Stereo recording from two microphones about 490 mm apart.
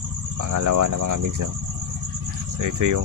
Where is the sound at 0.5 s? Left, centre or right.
Right.